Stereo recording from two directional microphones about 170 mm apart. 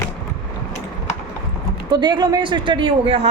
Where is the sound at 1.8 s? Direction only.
25° right (ahead or behind).